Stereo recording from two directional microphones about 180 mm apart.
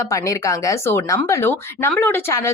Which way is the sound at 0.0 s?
20° left (ahead or behind).